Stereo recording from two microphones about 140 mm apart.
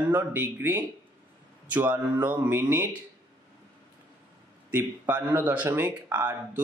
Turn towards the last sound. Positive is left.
turn(degrees=-15)  # may be behind; listen again after turning